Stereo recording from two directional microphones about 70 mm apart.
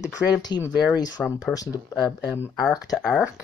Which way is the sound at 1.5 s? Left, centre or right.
Left.